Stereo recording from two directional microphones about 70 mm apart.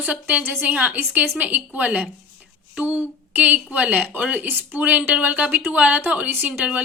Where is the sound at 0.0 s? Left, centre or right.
Centre.